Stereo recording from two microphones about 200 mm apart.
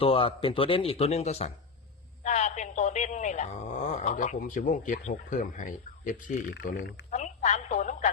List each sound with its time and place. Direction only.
0.0 s speech: 25° left (ahead or behind)
6.7 s speech: 55° left (ahead or behind)
7.1 s telephone: 35° left (ahead or behind)